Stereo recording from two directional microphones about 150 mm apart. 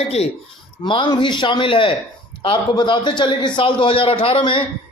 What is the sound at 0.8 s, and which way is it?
A man's voice, 35° left (ahead or behind).